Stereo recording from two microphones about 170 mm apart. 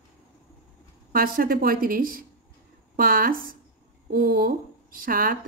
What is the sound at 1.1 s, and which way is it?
Speech, 55° right (ahead or behind).